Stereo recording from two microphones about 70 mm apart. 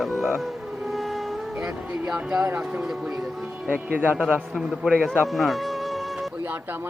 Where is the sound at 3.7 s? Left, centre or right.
Right.